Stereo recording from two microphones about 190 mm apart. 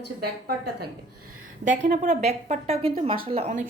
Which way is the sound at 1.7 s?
40° right (ahead or behind).